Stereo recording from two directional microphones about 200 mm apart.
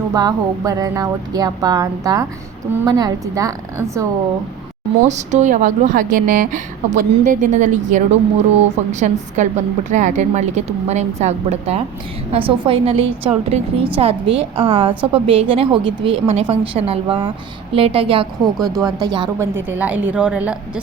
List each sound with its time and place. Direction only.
0.1 s a woman's voice: 20° right (ahead or behind)
5.0 s a woman's voice: 35° right (ahead or behind); by 19.5 s 20° right (ahead or behind)
19.6 s a woman's voice: 10° right (ahead or behind)